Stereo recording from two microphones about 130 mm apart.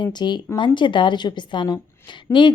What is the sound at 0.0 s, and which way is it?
A woman's voice, 35° left (ahead or behind).